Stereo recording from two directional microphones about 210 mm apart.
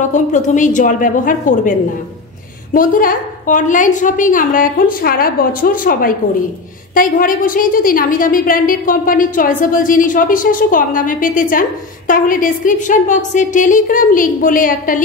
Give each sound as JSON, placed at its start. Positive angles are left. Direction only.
{"t": 0.0, "sound": "a woman's voice", "side_deg": 35}